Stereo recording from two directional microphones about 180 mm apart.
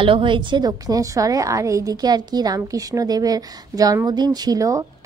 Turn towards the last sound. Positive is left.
turn(degrees=-20)  # may be behind; listen again after turning